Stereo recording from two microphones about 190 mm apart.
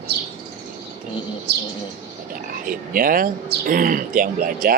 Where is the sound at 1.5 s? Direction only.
60° right (ahead or behind).